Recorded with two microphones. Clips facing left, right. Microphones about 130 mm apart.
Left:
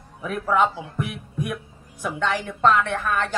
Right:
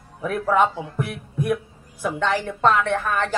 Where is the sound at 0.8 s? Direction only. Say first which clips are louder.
Right 2 dB; 10° left (ahead or behind).